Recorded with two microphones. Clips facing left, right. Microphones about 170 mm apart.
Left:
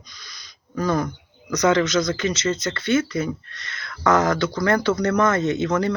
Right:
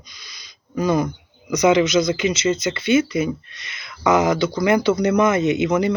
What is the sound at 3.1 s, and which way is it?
A man's voice, 15° right (ahead or behind).